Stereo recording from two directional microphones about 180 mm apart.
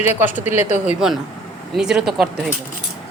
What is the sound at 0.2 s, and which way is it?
Speech, 10° right (ahead or behind).